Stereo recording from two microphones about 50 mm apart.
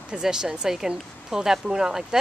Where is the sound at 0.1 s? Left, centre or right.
Centre.